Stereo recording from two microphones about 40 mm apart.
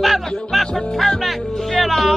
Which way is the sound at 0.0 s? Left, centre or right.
Centre.